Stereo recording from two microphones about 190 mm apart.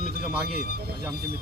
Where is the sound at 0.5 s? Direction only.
55° right (ahead or behind).